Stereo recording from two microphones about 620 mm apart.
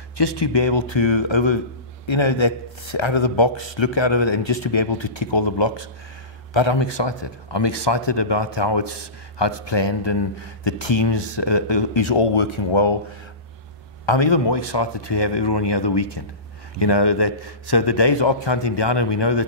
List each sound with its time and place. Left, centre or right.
0.2 s a man's voice: left
14.0 s speech: left